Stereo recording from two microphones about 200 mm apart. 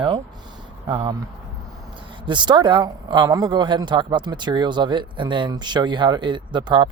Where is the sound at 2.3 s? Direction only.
20° right (ahead or behind).